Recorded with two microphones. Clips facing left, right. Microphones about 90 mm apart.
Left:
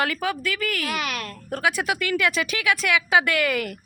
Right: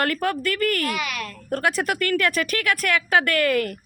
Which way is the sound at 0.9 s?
45° left (ahead or behind).